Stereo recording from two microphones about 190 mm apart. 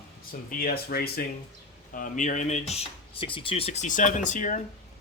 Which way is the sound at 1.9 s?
40° left (ahead or behind).